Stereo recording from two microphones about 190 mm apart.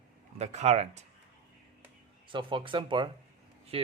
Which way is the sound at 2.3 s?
25° right (ahead or behind).